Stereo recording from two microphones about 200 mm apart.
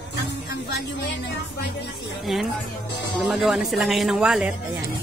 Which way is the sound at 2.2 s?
Centre (ahead or behind).